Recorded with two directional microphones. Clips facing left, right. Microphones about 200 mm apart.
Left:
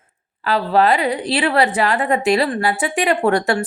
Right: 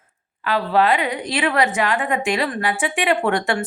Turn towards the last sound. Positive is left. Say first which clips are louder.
# left 3 dB
turn(degrees=40)  # may be behind; listen again after turning